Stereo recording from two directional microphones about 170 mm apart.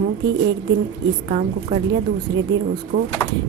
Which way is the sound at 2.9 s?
65° right (ahead or behind).